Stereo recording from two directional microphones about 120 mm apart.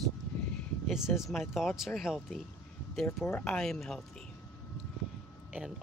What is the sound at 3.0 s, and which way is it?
Speech, 15° left (ahead or behind).